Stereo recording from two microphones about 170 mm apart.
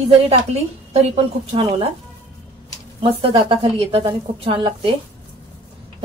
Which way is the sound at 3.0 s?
30° right (ahead or behind).